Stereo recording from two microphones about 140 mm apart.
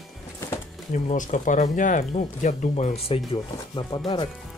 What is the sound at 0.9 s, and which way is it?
Speech, 65° left (ahead or behind).